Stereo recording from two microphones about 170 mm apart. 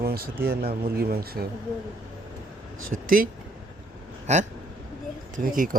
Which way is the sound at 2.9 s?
55° right (ahead or behind).